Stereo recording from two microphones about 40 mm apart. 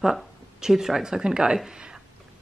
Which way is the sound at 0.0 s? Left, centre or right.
Centre.